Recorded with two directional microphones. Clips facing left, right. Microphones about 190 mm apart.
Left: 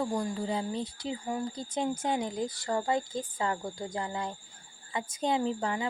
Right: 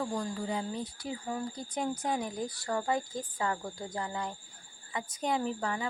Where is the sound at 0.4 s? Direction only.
30° left (ahead or behind).